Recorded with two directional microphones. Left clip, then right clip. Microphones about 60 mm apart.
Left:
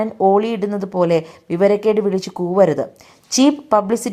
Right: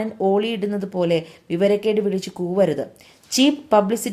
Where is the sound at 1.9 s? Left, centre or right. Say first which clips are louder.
Left 4 dB; left.